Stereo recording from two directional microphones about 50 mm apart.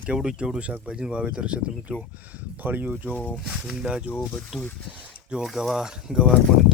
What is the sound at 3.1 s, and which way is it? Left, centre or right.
Speech, left.